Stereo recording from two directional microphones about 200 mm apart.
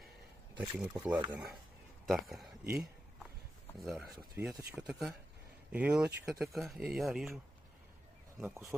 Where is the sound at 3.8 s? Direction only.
Centre (ahead or behind).